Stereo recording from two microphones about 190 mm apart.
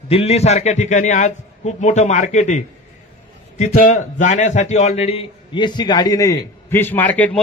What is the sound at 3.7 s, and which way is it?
A man's voice, 40° left (ahead or behind).